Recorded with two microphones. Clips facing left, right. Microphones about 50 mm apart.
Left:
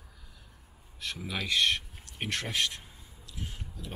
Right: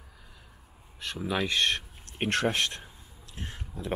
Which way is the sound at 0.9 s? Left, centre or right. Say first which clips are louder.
Right 5 dB; right.